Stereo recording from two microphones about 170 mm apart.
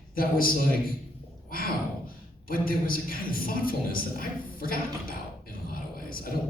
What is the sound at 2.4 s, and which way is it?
A man's voice, 60° left (ahead or behind).